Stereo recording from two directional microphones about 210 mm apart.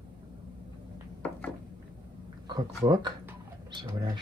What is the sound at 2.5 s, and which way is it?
Speech, 20° right (ahead or behind).